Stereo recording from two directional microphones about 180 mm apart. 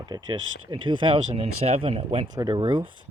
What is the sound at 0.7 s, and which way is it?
Speech, 25° right (ahead or behind).